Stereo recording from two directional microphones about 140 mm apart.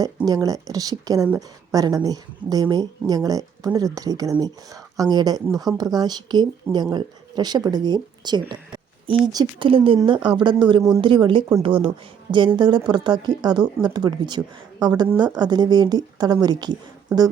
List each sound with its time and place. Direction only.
0.3 s a woman's voice: 25° right (ahead or behind)